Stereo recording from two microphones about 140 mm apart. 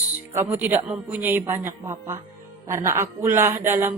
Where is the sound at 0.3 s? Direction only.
15° right (ahead or behind).